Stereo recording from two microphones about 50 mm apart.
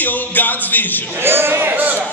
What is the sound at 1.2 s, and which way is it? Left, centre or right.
Speech, right.